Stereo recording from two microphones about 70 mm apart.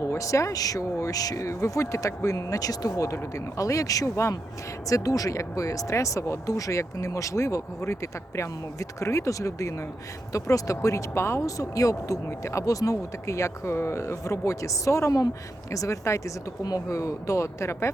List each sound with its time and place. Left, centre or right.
0.0 s speech: left